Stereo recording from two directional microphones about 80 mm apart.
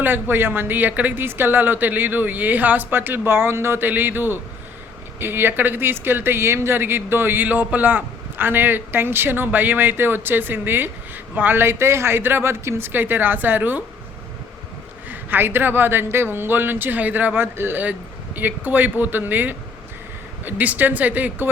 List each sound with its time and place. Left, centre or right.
0.0 s speech: right
15.1 s speech: right